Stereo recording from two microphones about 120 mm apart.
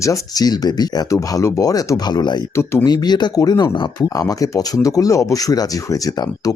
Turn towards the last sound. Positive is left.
turn(degrees=30)  # may be behind; listen again after turning